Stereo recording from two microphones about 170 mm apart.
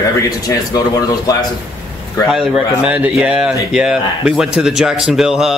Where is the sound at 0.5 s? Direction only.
20° left (ahead or behind).